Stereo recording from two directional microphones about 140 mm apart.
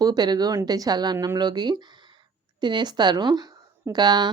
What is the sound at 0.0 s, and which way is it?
Speech, 30° right (ahead or behind).